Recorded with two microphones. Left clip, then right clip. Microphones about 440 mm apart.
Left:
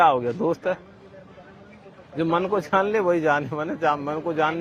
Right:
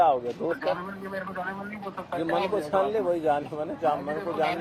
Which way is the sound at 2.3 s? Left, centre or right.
Left.